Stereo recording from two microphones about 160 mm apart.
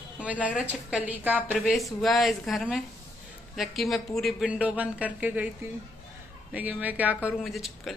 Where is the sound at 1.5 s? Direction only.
Centre (ahead or behind).